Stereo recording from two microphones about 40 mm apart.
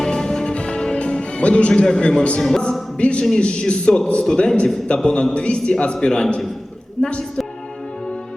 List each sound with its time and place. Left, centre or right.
0.0 s music: centre
1.8 s a man's voice: left
2.4 s a sound: centre
3.0 s a man's voice: left
4.9 s a man's voice: left
7.0 s a sound: centre